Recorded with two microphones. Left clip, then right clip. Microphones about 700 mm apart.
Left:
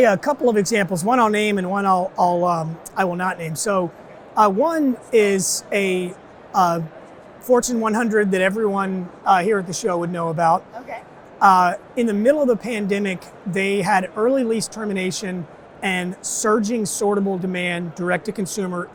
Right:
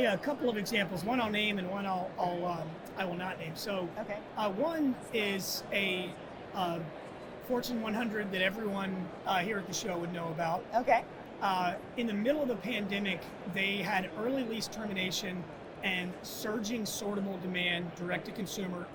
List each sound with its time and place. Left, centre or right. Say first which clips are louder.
0.0 s a man's voice: left 15 dB; left
1.3 s a man's voice: left 13 dB; left